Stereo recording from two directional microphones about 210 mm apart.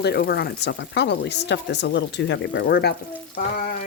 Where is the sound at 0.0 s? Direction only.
50° left (ahead or behind).